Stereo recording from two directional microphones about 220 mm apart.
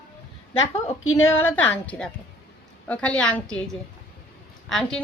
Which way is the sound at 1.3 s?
10° left (ahead or behind).